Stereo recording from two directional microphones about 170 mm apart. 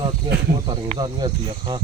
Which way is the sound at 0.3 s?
25° right (ahead or behind).